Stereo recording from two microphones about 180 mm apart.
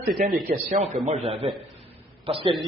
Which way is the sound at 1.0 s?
35° right (ahead or behind).